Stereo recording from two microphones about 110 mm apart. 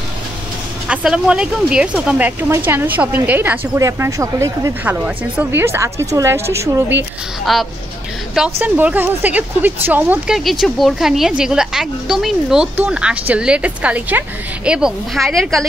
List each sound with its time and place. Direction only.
0.8 s a woman's voice: 10° right (ahead or behind); by 4.7 s 25° right (ahead or behind)
4.8 s a woman's voice: 15° right (ahead or behind)
7.5 s speech: centre (ahead or behind)
8.5 s a woman's voice: 15° right (ahead or behind)
10.2 s a woman's voice: centre (ahead or behind)